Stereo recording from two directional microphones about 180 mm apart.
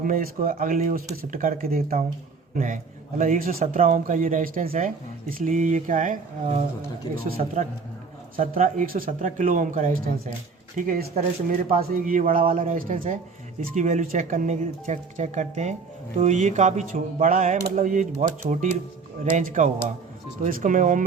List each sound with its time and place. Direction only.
0.0 s speech: 50° right (ahead or behind)
3.2 s a man's voice: 50° right (ahead or behind)